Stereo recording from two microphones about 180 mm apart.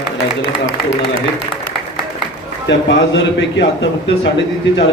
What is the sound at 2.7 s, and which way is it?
A man's voice, 80° left.